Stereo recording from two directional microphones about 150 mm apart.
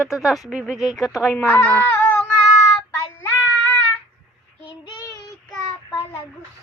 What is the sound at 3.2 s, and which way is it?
Child singing, 15° left (ahead or behind).